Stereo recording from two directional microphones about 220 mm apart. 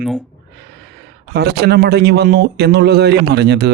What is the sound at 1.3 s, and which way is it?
Speech, 50° right (ahead or behind).